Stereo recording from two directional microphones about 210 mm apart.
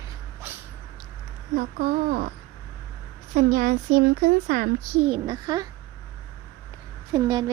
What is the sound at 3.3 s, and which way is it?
A woman's voice, 40° right (ahead or behind).